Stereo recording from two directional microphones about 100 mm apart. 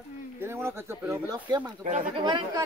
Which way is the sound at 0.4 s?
25° right (ahead or behind).